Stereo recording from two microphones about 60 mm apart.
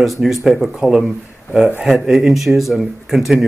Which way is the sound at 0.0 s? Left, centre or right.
Centre.